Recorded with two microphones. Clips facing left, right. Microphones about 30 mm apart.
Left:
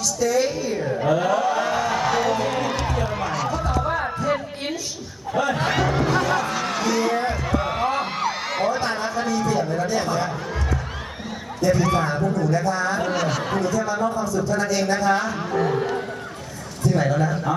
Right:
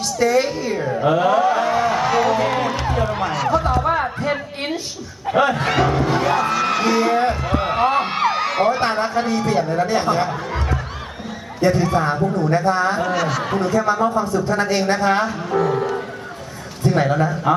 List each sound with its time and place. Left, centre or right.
0.0 s a sound: right; by 2.4 s centre
2.4 s music: right
3.9 s a sound: right
5.3 s speech: right
5.5 s speech: right
6.1 s music: right
7.5 s a sound: right
8.4 s a sound: right
8.6 s speech: right
11.6 s a man's voice: right
13.0 s speech: centre
13.6 s a man's voice: right
16.8 s a man's voice: right